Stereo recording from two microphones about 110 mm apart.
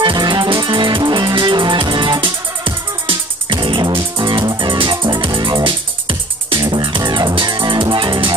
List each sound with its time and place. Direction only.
0.0 s music: 45° right (ahead or behind)